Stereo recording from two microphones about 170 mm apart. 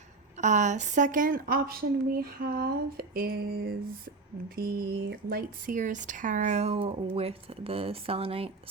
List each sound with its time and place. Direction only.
0.4 s speech: 45° right (ahead or behind)